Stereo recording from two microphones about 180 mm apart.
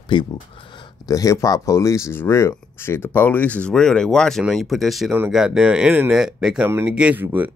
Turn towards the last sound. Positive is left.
turn(degrees=-10)  # may be behind; listen again after turning